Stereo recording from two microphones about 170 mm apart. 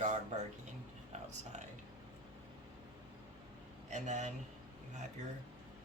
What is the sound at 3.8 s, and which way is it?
Speech, 45° right (ahead or behind).